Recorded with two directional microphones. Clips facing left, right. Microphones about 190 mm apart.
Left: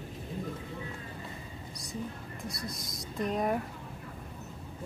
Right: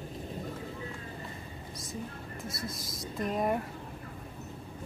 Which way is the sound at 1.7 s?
Centre (ahead or behind).